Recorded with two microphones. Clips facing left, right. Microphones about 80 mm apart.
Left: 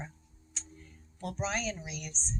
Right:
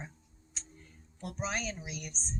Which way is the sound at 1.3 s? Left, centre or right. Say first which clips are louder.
Left 2 dB; centre.